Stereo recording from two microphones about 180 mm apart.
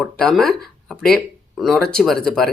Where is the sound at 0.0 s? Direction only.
5° left (ahead or behind).